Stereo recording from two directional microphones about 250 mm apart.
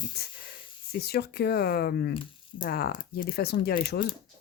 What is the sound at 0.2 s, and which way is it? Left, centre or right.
Speech, left.